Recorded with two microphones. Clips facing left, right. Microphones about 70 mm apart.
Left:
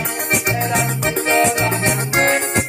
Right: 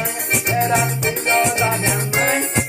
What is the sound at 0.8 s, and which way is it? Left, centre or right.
Music, left.